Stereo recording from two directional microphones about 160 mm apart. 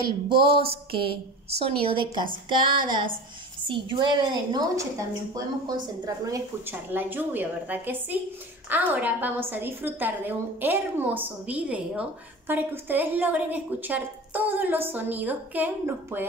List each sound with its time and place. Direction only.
0.4 s a woman's voice: 35° right (ahead or behind)
6.0 s a woman's voice: 20° right (ahead or behind)